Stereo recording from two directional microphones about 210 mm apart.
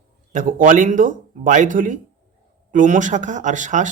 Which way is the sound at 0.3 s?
40° right (ahead or behind).